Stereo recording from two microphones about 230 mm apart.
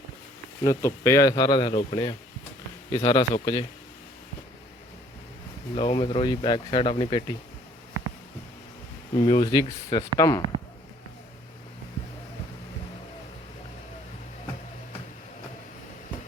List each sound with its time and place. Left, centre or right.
0.6 s speech: centre
5.7 s speech: left
9.1 s speech: left